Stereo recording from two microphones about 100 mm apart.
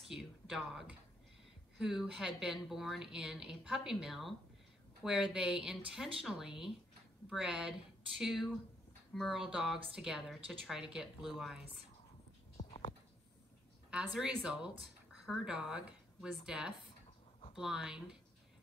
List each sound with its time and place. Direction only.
0.1 s a woman's voice: 5° right (ahead or behind)
12.6 s a sound: 40° left (ahead or behind)
13.8 s speech: 10° right (ahead or behind)